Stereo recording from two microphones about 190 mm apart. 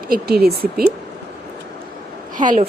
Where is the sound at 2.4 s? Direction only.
45° right (ahead or behind).